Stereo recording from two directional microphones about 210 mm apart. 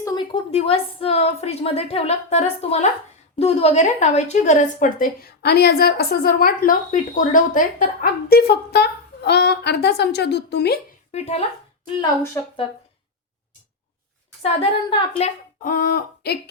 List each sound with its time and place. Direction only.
0.0 s a woman's voice: 20° left (ahead or behind); by 10.8 s 50° left (ahead or behind)
11.1 s a woman's voice: 30° left (ahead or behind)
11.9 s a woman's voice: 20° left (ahead or behind)
14.4 s a woman's voice: 25° left (ahead or behind)
15.2 s a woman's voice: 40° left (ahead or behind)